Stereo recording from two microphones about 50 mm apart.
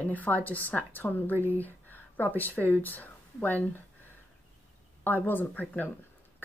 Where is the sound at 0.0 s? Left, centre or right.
Left.